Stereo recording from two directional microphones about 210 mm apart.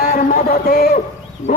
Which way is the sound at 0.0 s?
40° left (ahead or behind).